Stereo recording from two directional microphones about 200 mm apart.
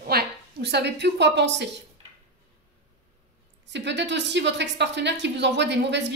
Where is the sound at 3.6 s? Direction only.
60° right (ahead or behind).